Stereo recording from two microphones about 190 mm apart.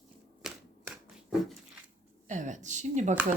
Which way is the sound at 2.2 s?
40° right (ahead or behind).